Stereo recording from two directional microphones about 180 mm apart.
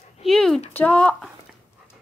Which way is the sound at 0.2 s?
Centre (ahead or behind).